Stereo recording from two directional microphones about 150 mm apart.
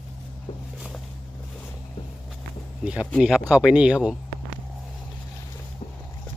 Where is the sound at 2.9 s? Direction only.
5° right (ahead or behind).